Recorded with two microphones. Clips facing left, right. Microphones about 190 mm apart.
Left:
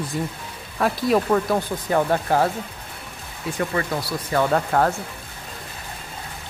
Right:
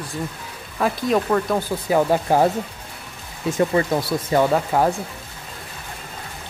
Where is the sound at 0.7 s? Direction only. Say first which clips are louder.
Even; centre (ahead or behind).